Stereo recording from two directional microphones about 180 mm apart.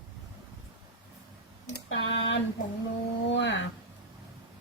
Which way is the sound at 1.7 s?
80° left.